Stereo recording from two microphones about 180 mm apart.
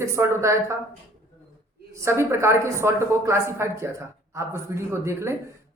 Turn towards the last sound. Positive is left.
turn(degrees=-15)  # may be behind; listen again after turning